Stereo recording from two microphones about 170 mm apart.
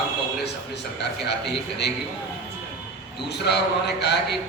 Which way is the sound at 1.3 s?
80° left.